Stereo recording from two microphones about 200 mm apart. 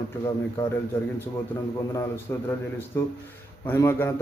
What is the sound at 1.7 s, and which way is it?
Speech, 15° left (ahead or behind).